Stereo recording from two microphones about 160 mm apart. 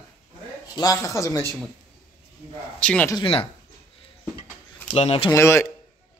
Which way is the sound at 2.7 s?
5° left (ahead or behind).